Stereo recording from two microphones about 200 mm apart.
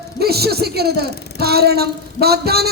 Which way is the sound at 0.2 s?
50° right (ahead or behind).